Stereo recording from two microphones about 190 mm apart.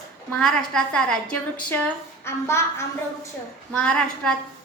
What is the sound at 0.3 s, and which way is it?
A woman's voice, 5° left (ahead or behind).